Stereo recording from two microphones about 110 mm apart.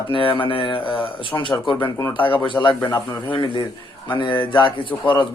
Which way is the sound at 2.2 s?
50° left (ahead or behind).